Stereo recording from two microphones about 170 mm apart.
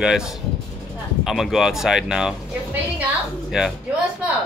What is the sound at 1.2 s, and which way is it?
Speech, centre (ahead or behind).